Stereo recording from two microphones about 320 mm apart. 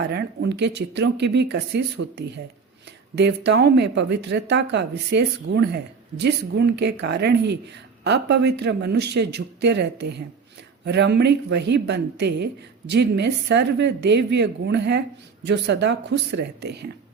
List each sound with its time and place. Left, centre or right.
0.1 s speech: right